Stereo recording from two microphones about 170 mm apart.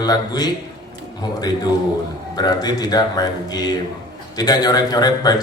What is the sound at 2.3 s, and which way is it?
A man's voice, 25° left (ahead or behind).